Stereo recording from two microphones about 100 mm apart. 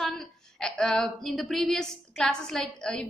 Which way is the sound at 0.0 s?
5° left (ahead or behind).